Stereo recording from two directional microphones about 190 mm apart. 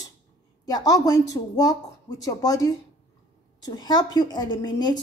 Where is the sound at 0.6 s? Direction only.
20° left (ahead or behind).